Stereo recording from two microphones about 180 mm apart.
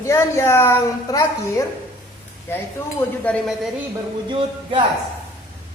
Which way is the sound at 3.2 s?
5° left (ahead or behind).